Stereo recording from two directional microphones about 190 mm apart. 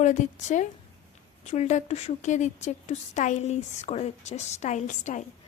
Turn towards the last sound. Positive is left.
turn(degrees=40)  # may be behind; listen again after turning